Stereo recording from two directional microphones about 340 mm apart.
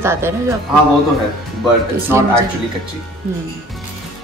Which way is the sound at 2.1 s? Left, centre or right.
Centre.